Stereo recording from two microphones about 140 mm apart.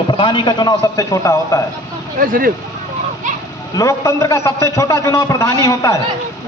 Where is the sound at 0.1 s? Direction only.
35° left (ahead or behind).